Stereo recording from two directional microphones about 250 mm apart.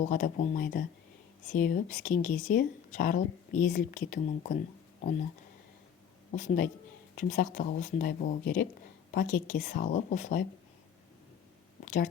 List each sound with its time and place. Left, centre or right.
0.0 s speech: left
6.3 s speech: left